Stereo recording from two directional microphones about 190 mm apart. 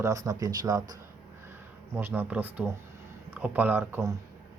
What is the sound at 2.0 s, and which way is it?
Speech, 10° right (ahead or behind).